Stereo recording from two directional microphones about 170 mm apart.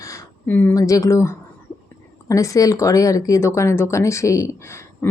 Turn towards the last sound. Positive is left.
turn(degrees=15)  # may be behind; listen again after turning